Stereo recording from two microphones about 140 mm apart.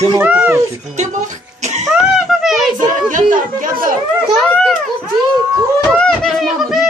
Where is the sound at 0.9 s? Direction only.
60° right (ahead or behind).